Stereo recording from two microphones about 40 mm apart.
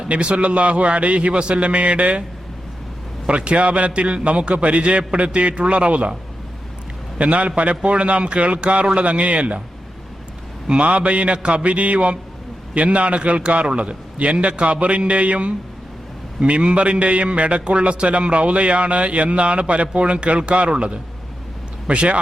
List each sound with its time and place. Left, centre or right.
0.1 s a man's voice: right
3.2 s a man's voice: right
7.2 s a man's voice: right
10.7 s a man's voice: right